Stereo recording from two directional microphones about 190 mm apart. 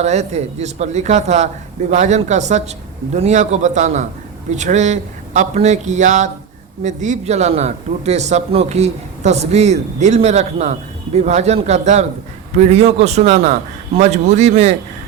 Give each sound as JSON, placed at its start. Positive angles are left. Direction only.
{"t": 0.0, "sound": "a man's voice", "side_deg": -35}